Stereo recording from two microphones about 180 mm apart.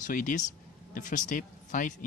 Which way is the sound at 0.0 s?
45° left (ahead or behind).